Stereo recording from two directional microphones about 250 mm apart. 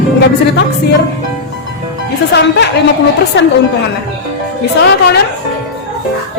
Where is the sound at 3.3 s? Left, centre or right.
Left.